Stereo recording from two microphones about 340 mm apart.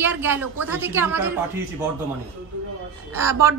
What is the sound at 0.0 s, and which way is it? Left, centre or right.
A woman's voice, centre.